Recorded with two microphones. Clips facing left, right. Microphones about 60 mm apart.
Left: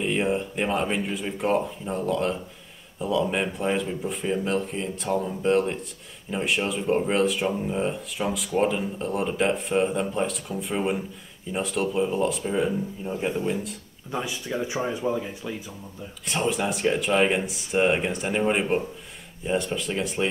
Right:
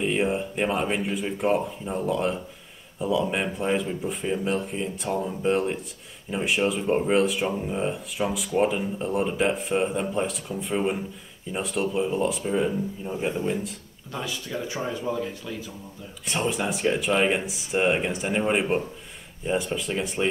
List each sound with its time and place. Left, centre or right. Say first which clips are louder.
0.0 s speech: even; centre
14.1 s speech: left 3 dB; centre
16.3 s speech: left 1 dB; centre